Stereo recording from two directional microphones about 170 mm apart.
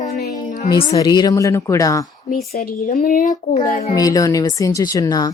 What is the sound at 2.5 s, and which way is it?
A child's voice, 55° left (ahead or behind).